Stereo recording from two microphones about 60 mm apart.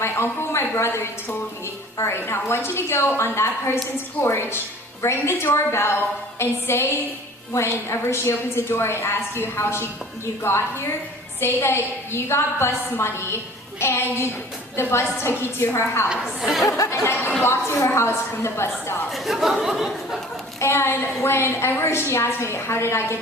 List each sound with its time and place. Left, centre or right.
0.0 s a woman's voice: left
16.0 s speech: centre
16.7 s a woman's voice: left
19.1 s speech: centre
20.6 s a woman's voice: left